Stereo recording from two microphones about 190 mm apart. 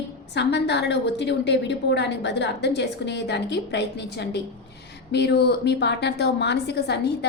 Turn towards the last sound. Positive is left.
turn(degrees=60)  # may be behind; listen again after turning